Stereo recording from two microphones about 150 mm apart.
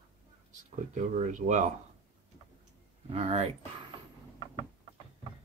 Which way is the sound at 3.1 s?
45° right (ahead or behind).